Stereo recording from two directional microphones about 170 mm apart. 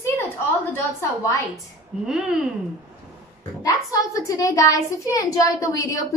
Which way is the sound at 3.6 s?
20° left (ahead or behind).